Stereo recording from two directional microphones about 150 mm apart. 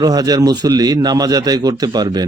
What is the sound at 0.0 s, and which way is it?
A man's voice, 25° right (ahead or behind).